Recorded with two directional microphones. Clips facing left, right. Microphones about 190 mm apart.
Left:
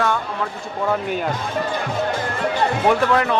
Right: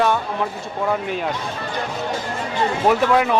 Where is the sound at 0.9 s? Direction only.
Centre (ahead or behind).